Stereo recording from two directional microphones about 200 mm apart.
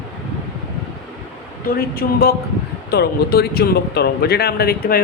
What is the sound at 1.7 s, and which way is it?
A man's voice, 50° left (ahead or behind).